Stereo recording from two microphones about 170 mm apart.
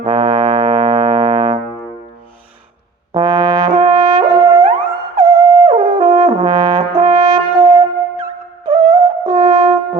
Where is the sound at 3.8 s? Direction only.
25° right (ahead or behind).